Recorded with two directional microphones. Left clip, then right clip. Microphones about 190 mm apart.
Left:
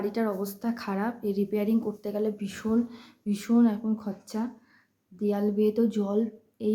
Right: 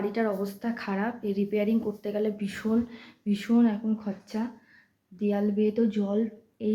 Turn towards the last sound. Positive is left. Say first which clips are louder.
# left 1 dB
turn(degrees=20)  # may be behind; listen again after turning